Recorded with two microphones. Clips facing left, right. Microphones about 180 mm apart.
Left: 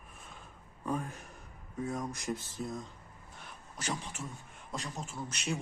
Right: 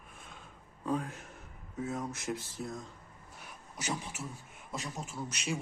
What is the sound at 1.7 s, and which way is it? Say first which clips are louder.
Speech: even; 5° right (ahead or behind).